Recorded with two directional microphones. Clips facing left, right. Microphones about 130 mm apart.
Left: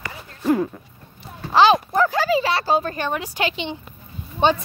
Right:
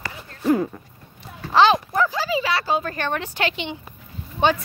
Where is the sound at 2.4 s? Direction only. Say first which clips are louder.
Left 2 dB; 30° left (ahead or behind).